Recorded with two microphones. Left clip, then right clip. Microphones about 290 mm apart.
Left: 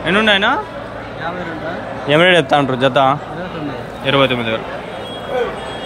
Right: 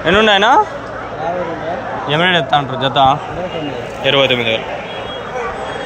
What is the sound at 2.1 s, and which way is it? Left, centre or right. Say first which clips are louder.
A man's voice: left 2 dB; centre.